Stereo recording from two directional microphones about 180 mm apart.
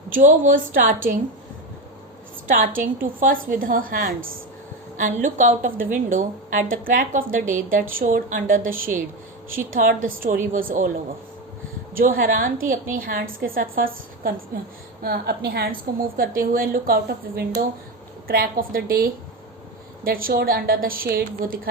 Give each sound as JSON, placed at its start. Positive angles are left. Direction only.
{"t": 0.1, "sound": "a woman's voice", "side_deg": -45}
{"t": 2.5, "sound": "a woman's voice", "side_deg": -50}
{"t": 11.9, "sound": "a woman's voice", "side_deg": -50}